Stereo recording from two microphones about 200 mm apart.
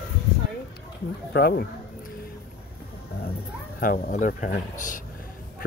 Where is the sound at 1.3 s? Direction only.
50° left (ahead or behind).